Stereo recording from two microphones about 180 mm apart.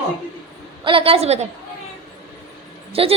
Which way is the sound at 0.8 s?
30° right (ahead or behind).